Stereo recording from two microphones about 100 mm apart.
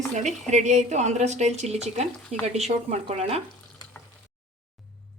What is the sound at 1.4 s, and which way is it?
Speech, 90° right.